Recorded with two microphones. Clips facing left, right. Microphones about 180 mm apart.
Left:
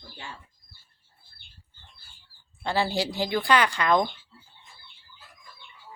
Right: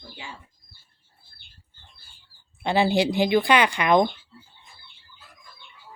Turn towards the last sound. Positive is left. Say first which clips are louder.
# right 4 dB
turn(degrees=-20)  # may be behind; listen again after turning